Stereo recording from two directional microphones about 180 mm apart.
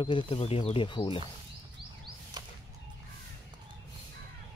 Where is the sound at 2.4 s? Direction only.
25° right (ahead or behind).